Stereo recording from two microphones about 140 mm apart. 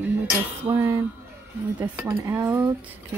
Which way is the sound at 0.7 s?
20° right (ahead or behind).